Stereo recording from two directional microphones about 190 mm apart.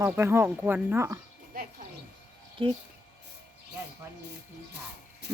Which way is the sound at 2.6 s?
25° right (ahead or behind).